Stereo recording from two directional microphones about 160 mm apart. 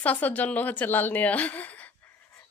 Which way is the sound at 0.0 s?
10° left (ahead or behind).